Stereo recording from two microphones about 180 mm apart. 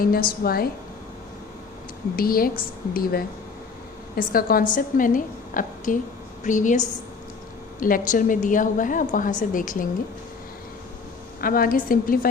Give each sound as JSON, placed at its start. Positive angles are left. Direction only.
{"t": 0.0, "sound": "a woman's voice", "side_deg": 55}
{"t": 2.1, "sound": "a woman's voice", "side_deg": 55}
{"t": 11.3, "sound": "a woman's voice", "side_deg": 55}